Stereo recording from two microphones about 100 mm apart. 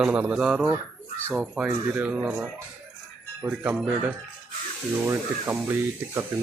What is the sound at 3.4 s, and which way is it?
Speech, 15° right (ahead or behind).